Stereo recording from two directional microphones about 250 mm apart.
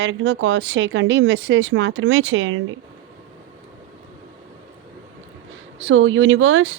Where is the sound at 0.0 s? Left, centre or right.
Right.